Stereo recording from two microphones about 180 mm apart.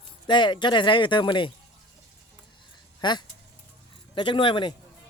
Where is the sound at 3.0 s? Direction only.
25° left (ahead or behind).